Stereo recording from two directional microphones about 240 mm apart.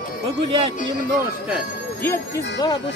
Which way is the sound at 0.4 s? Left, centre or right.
Right.